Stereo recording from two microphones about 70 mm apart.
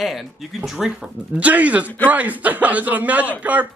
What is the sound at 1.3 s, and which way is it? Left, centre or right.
Speech, right.